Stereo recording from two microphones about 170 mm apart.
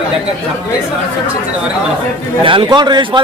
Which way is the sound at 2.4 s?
30° right (ahead or behind).